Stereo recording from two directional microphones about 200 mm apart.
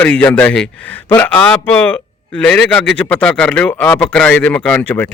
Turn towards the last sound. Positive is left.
turn(degrees=5)  # may be behind; listen again after turning